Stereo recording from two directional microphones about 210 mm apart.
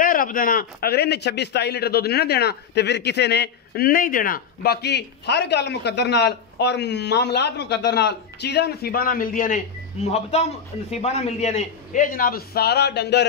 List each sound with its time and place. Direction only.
0.0 s a man's voice: 40° left (ahead or behind)